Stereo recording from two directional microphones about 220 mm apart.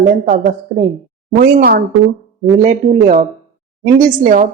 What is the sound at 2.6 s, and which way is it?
A woman's voice, 30° right (ahead or behind).